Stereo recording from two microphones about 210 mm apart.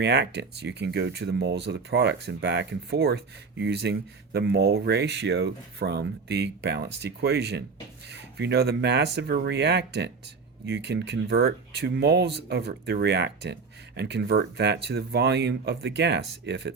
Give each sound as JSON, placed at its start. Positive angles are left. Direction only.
{"t": 0.0, "sound": "speech", "side_deg": -55}